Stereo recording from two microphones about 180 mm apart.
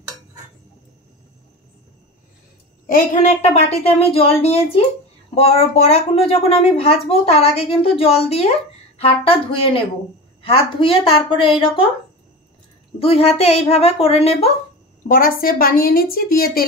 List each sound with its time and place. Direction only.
2.9 s a woman's voice: 40° left (ahead or behind)
13.0 s a woman's voice: 30° left (ahead or behind)
15.0 s a woman's voice: 50° left (ahead or behind)